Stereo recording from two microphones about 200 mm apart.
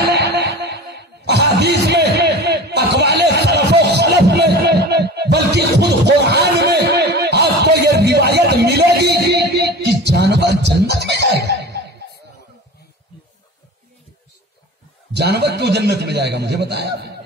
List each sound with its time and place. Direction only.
0.2 s music: 55° right (ahead or behind)
15.1 s a man's voice: 55° right (ahead or behind)